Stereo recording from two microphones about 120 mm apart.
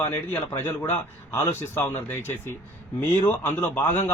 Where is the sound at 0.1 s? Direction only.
20° left (ahead or behind).